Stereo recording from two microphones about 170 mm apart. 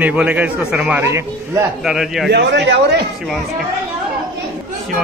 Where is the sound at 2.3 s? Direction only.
85° right.